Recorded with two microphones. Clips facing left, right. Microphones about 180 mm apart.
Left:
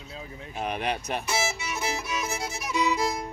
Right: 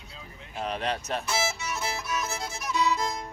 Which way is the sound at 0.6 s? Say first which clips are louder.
Left 1 dB; 10° left (ahead or behind).